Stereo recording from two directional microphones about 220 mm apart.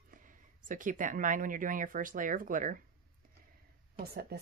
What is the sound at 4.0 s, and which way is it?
Speech, 45° right (ahead or behind).